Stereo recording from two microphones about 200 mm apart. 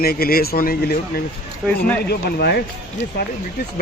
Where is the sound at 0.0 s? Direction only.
50° left (ahead or behind).